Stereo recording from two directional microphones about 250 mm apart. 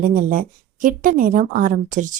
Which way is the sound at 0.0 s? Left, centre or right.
Right.